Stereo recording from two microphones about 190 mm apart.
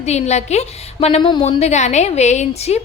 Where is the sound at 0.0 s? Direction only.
35° left (ahead or behind).